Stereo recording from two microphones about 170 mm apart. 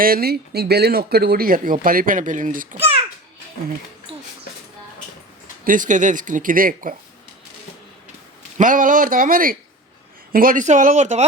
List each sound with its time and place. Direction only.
0.0 s speech: 60° right (ahead or behind)
4.1 s a sound: 35° right (ahead or behind)
5.6 s speech: 50° right (ahead or behind)
8.5 s speech: 50° right (ahead or behind)